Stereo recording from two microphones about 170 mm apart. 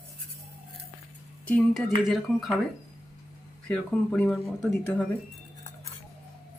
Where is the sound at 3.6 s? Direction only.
5° left (ahead or behind).